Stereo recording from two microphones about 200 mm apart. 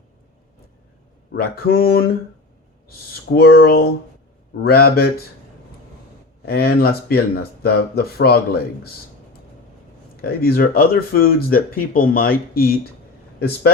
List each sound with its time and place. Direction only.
1.3 s speech: 50° left (ahead or behind)
3.2 s speech: 50° left (ahead or behind)
6.5 s speech: 50° left (ahead or behind)
10.2 s speech: 50° left (ahead or behind)